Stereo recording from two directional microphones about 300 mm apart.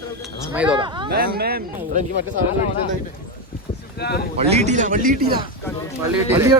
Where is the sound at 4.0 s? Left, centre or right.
Left.